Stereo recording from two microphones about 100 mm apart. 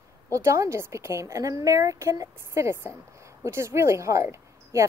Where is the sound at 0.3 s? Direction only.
30° right (ahead or behind).